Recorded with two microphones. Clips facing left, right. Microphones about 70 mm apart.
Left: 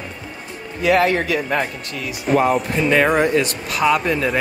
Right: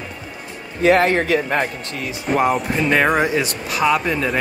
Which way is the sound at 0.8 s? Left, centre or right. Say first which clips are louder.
Right 2 dB; right.